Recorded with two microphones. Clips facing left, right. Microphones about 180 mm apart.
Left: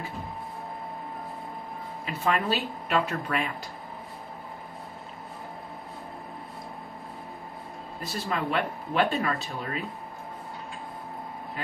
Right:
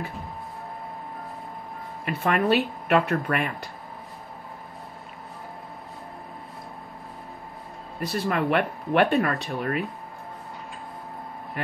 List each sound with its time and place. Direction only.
2.0 s speech: 60° right (ahead or behind)
8.0 s speech: 60° right (ahead or behind)